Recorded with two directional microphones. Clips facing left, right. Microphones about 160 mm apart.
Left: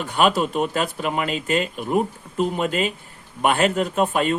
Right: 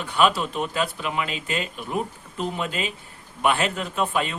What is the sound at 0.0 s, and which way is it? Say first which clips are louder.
Speech: left 2 dB; 45° left (ahead or behind).